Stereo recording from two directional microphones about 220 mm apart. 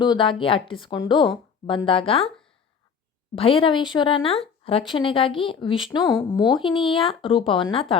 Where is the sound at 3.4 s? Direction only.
25° left (ahead or behind).